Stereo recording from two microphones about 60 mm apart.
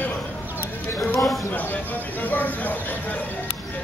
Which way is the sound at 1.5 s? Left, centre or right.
Left.